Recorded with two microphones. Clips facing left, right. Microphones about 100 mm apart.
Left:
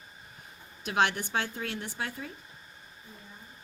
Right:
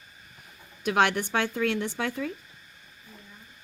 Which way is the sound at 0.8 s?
50° right (ahead or behind).